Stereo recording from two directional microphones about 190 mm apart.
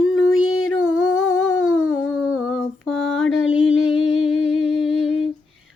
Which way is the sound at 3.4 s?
90° left.